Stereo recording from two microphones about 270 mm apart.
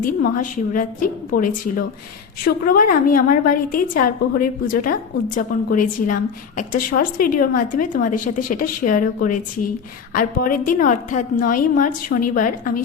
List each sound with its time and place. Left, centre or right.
0.0 s a woman's voice: left
2.4 s a woman's voice: left